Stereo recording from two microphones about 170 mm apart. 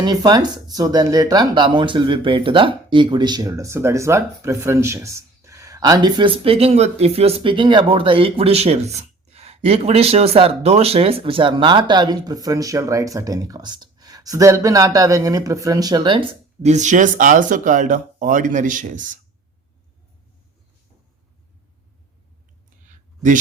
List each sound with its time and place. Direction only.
0.0 s speech: 25° right (ahead or behind)
16.7 s speech: 45° right (ahead or behind)
22.9 s a sound: 50° right (ahead or behind)